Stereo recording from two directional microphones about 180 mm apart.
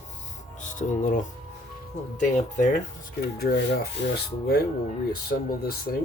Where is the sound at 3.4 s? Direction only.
65° left (ahead or behind).